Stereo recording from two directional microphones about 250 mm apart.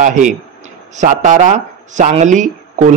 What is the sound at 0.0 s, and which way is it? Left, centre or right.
A man's voice, right.